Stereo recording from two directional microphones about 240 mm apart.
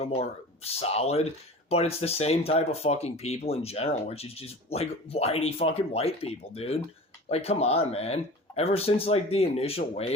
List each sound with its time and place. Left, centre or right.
0.0 s speech: left